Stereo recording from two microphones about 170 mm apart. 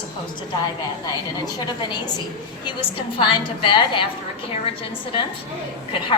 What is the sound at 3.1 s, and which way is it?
Speech, 30° left (ahead or behind).